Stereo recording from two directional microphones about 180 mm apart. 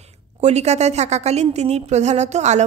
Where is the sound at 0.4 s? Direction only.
40° right (ahead or behind).